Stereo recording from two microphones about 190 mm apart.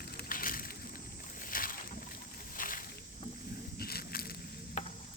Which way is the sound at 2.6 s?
45° left (ahead or behind).